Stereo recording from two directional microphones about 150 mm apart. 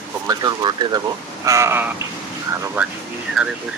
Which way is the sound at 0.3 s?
25° right (ahead or behind).